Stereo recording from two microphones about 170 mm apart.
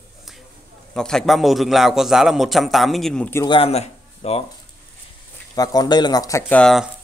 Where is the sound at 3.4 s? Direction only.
30° left (ahead or behind).